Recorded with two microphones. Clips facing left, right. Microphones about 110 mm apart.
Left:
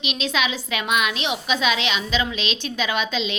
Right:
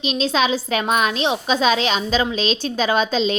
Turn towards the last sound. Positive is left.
turn(degrees=-40)  # may be behind; listen again after turning